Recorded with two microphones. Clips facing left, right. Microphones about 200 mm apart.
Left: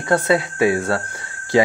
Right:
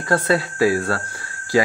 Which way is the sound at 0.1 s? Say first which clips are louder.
Left 2 dB; 20° left (ahead or behind).